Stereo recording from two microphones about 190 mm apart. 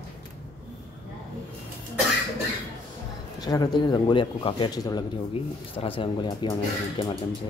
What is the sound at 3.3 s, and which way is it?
Speech, 20° left (ahead or behind).